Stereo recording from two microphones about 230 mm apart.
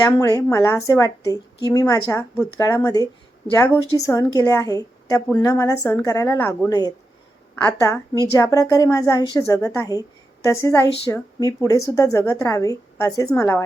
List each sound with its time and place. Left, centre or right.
0.2 s a woman's voice: centre